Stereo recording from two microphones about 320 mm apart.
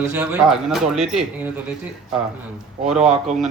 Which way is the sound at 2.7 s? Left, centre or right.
Centre.